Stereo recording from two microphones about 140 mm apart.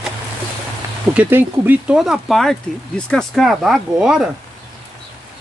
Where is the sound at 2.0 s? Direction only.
Centre (ahead or behind).